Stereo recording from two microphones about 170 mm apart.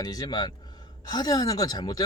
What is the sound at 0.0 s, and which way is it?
Speech, 25° left (ahead or behind).